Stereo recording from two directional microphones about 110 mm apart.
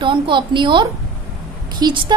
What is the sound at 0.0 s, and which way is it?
A woman's voice, 50° right (ahead or behind).